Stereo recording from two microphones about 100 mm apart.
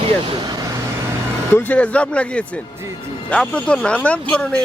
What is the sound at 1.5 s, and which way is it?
A man's voice, 20° left (ahead or behind).